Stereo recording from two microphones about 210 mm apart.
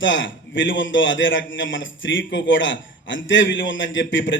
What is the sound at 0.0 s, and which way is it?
A man's voice, 60° left (ahead or behind).